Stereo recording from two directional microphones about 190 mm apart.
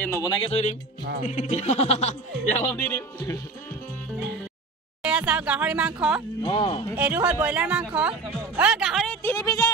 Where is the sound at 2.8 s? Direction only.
10° left (ahead or behind).